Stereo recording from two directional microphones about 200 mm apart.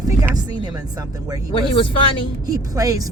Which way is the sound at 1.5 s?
25° left (ahead or behind).